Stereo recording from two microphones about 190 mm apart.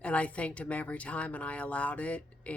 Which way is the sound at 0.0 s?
5° left (ahead or behind).